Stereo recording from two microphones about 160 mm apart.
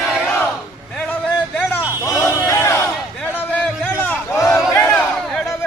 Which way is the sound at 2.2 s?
20° left (ahead or behind).